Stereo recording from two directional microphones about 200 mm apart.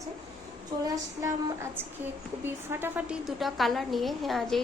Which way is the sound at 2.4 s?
10° right (ahead or behind).